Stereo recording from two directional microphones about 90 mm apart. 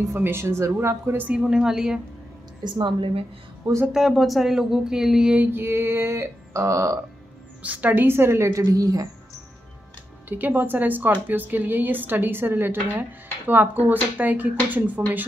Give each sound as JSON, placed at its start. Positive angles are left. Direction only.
{"t": 0.0, "sound": "a woman's voice", "side_deg": -30}
{"t": 1.3, "sound": "a woman's voice", "side_deg": -5}
{"t": 2.6, "sound": "a woman's voice", "side_deg": -65}
{"t": 3.9, "sound": "speech", "side_deg": 0}
{"t": 5.5, "sound": "a sound", "side_deg": -25}
{"t": 7.6, "sound": "a woman's voice", "side_deg": -15}
{"t": 10.2, "sound": "a woman's voice", "side_deg": -20}